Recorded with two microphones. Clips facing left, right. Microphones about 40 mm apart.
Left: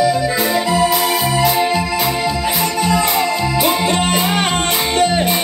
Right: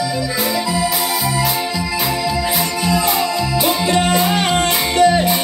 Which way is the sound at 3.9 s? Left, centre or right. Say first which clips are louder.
Right 1 dB; left.